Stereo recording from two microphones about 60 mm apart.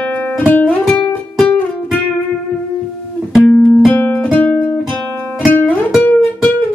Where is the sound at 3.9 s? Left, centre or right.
Left.